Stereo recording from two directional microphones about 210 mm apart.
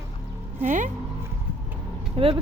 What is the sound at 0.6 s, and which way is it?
Speech, 35° right (ahead or behind).